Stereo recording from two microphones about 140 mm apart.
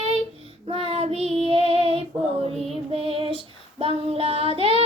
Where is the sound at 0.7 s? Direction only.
45° right (ahead or behind).